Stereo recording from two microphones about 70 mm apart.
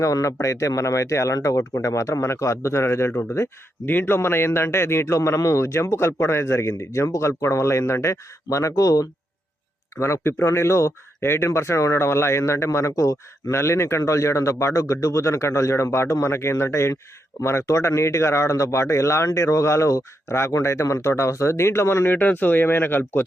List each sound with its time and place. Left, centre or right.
0.0 s speech: left
10.0 s speech: left